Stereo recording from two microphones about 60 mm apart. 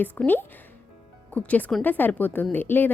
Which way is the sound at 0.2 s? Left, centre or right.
Left.